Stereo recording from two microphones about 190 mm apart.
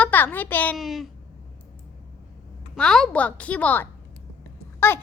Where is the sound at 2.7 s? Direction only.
5° left (ahead or behind).